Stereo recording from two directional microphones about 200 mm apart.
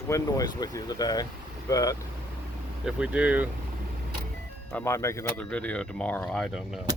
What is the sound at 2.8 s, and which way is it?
Speech, 5° right (ahead or behind).